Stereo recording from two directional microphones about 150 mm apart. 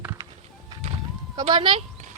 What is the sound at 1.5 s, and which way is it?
Speech, 35° right (ahead or behind).